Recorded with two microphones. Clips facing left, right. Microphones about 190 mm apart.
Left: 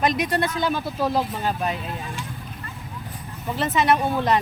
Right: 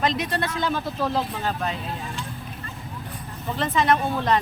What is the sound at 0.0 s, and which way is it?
Speech, 10° left (ahead or behind).